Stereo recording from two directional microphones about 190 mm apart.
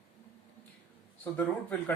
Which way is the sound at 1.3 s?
10° left (ahead or behind).